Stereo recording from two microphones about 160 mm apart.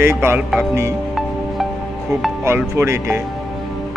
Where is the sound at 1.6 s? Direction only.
Centre (ahead or behind).